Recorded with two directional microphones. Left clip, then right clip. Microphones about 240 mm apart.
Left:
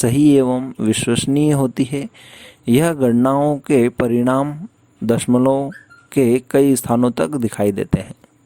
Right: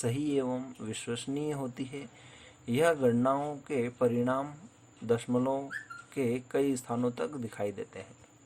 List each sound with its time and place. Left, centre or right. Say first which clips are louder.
0.0 s speech: left 18 dB; left